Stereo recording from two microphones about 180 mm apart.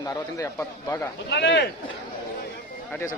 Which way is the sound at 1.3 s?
75° left (ahead or behind).